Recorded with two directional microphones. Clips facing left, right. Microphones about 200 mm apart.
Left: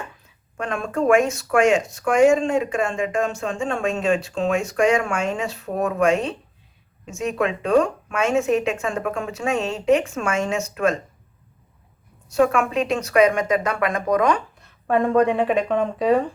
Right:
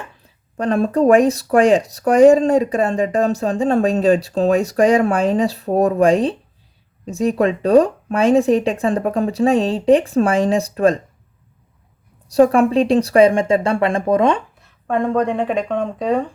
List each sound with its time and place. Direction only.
0.2 s speech: 35° right (ahead or behind)
12.3 s speech: 35° right (ahead or behind)
14.6 s speech: 5° left (ahead or behind)